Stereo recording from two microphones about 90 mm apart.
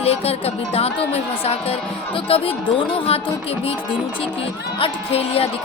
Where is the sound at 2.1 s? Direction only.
80° left.